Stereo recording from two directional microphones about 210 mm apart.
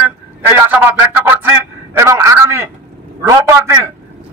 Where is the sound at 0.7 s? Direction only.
10° right (ahead or behind).